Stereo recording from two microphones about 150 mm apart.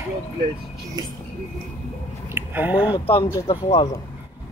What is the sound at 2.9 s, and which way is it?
Speech, 40° left (ahead or behind).